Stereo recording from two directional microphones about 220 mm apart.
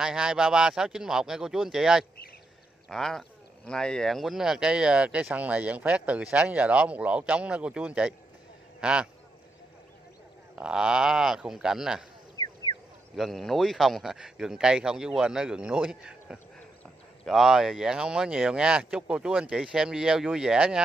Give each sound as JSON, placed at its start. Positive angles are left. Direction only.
{"t": 0.0, "sound": "speech", "side_deg": -5}
{"t": 10.5, "sound": "speech", "side_deg": -5}
{"t": 12.4, "sound": "a sound", "side_deg": 15}
{"t": 13.1, "sound": "speech", "side_deg": 0}